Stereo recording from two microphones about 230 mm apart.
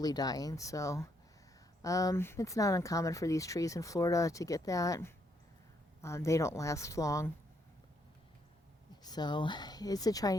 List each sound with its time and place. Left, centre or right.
0.0 s speech: centre
9.0 s speech: centre